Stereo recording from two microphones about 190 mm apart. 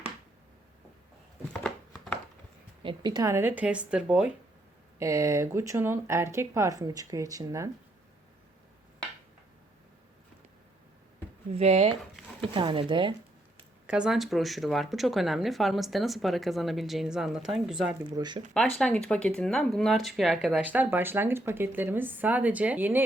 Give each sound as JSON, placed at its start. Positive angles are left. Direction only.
{"t": 1.6, "sound": "a sound", "side_deg": 0}
{"t": 2.8, "sound": "speech", "side_deg": -20}
{"t": 4.9, "sound": "speech", "side_deg": -15}
{"t": 11.5, "sound": "speech", "side_deg": -30}
{"t": 13.8, "sound": "speech", "side_deg": -5}
{"t": 18.1, "sound": "speech", "side_deg": -25}
{"t": 18.8, "sound": "speech", "side_deg": 5}